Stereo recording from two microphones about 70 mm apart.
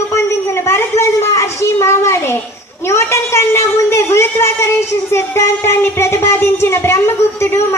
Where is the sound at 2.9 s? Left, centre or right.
Left.